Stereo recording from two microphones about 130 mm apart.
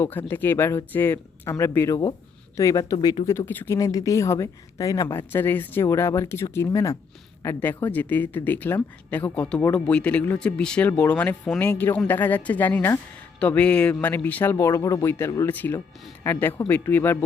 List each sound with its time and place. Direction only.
0.0 s speech: 15° left (ahead or behind)
3.2 s speech: 20° left (ahead or behind)
3.8 s speech: 25° left (ahead or behind)
5.1 s speech: 15° left (ahead or behind)
14.5 s speech: 25° left (ahead or behind)